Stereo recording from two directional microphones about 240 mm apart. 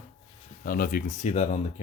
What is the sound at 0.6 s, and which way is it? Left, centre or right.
Speech, left.